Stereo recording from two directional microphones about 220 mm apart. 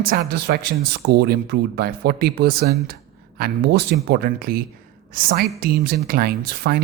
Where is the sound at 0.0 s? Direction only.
45° right (ahead or behind).